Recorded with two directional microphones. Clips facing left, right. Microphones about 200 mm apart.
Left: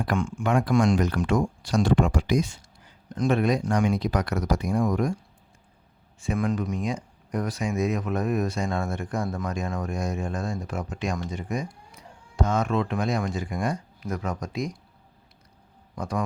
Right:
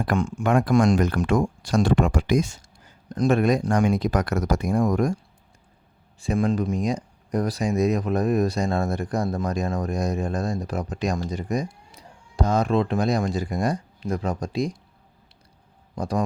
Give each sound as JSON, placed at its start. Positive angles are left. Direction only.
{"t": 0.0, "sound": "speech", "side_deg": -40}
{"t": 6.1, "sound": "speech", "side_deg": -35}
{"t": 16.0, "sound": "speech", "side_deg": -35}